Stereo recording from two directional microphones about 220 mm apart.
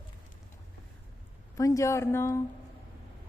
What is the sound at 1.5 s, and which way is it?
Speech, 15° left (ahead or behind).